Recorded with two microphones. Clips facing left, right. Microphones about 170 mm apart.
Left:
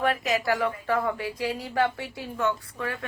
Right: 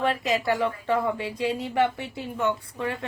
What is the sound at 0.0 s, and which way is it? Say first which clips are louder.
A woman's voice: right 1 dB; 25° right (ahead or behind).